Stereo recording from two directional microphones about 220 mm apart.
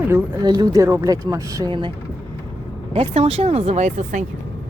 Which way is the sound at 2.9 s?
25° right (ahead or behind).